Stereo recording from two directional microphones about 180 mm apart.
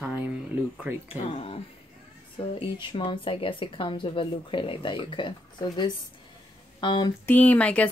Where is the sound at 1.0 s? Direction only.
30° left (ahead or behind).